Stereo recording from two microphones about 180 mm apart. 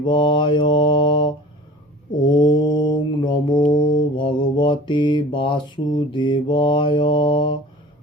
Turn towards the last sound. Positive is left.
turn(degrees=25)  # may be behind; listen again after turning